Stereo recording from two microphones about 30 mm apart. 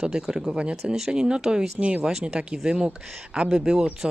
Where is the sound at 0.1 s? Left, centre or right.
Right.